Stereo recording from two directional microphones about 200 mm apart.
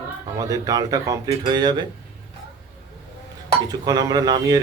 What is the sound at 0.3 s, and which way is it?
Speech, 15° right (ahead or behind).